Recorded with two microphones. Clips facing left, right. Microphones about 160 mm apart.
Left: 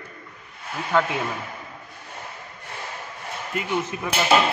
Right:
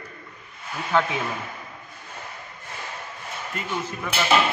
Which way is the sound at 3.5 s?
15° left (ahead or behind).